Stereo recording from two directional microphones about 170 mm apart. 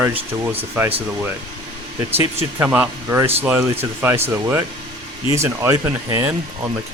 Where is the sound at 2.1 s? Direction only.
10° right (ahead or behind).